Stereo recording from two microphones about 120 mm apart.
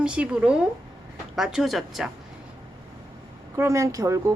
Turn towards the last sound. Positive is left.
turn(degrees=-25)  # may be behind; listen again after turning